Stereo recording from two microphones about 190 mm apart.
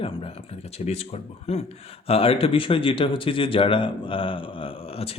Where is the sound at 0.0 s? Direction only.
30° left (ahead or behind).